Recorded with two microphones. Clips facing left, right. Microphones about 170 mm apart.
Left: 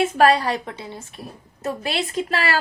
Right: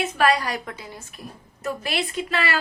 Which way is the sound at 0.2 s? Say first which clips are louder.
Left 3 dB; 30° left (ahead or behind).